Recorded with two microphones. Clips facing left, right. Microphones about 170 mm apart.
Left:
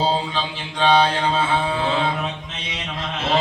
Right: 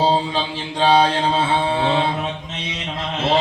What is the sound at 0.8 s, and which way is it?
Mantra, 30° right (ahead or behind).